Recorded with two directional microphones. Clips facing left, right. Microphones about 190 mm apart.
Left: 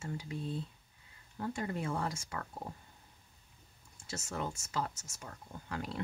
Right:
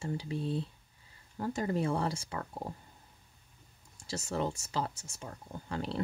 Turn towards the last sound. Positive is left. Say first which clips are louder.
# right 4 dB
turn(degrees=-30)  # may be behind; listen again after turning